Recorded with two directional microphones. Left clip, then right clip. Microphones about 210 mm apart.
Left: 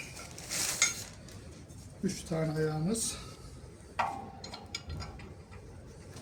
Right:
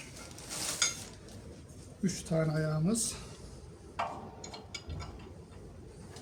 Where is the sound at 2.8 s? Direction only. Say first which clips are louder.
Right 1 dB; 40° right (ahead or behind).